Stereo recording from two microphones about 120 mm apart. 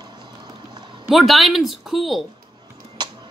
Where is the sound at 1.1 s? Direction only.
Centre (ahead or behind).